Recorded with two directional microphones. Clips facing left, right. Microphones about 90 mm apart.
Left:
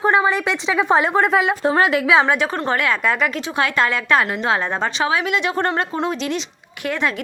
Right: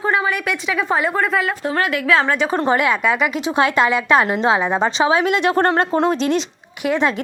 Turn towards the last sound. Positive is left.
turn(degrees=-20)  # may be behind; listen again after turning